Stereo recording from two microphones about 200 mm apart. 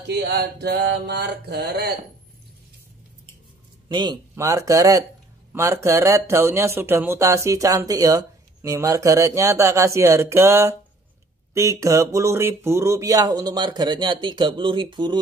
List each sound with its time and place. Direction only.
0.1 s mantra: 55° right (ahead or behind)
3.9 s speech: 20° right (ahead or behind)